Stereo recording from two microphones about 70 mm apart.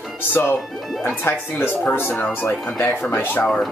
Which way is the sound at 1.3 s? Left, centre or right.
Left.